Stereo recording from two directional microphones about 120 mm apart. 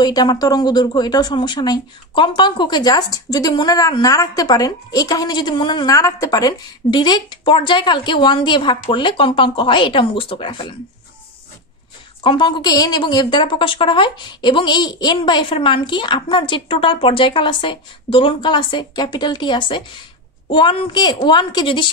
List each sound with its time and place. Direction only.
0.0 s speech: 35° left (ahead or behind)
12.2 s speech: 45° left (ahead or behind)